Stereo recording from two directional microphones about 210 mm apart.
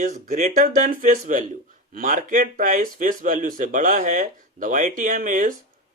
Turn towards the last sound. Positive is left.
turn(degrees=-40)  # may be behind; listen again after turning